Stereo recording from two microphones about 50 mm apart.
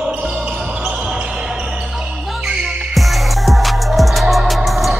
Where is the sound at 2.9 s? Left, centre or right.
Centre.